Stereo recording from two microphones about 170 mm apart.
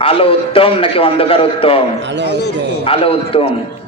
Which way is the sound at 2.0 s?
90° right.